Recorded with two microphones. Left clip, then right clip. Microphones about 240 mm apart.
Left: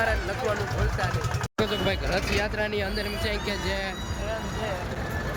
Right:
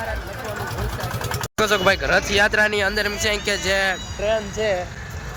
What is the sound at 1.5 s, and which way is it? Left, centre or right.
Speech, centre.